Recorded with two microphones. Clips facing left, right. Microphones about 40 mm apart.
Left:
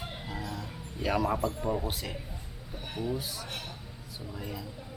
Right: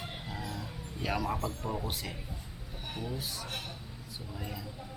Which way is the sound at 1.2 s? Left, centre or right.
Centre.